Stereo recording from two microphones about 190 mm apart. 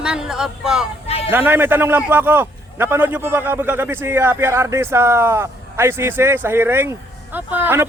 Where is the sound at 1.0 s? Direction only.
30° left (ahead or behind).